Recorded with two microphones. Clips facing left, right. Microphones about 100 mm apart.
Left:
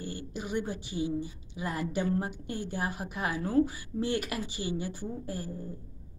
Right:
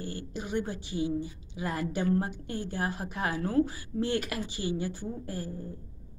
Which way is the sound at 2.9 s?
10° left (ahead or behind).